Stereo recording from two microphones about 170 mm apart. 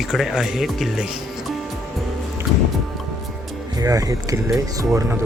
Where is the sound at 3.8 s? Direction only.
20° right (ahead or behind).